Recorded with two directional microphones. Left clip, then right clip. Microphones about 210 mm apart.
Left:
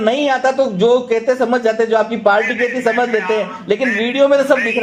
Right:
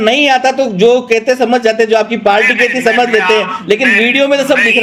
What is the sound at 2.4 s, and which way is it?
A man's voice, 40° right (ahead or behind).